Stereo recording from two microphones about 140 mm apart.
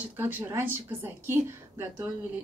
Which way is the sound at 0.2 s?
15° right (ahead or behind).